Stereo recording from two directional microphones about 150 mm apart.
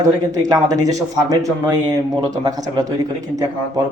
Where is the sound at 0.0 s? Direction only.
25° right (ahead or behind).